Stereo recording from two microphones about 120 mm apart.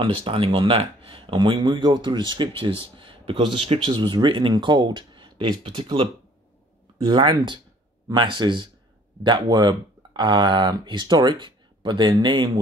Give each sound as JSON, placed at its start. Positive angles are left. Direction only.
{"t": 0.0, "sound": "speech", "side_deg": -50}
{"t": 7.1, "sound": "speech", "side_deg": -40}